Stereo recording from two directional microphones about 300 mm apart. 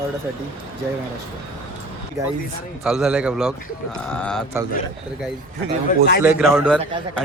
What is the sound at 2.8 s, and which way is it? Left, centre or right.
A man's voice, centre.